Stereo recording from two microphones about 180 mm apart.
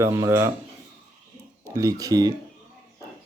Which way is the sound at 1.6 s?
15° right (ahead or behind).